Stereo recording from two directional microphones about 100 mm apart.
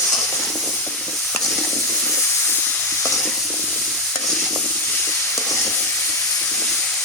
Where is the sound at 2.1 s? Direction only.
20° left (ahead or behind).